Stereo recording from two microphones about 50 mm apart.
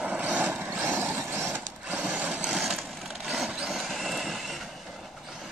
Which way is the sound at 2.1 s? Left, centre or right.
Right.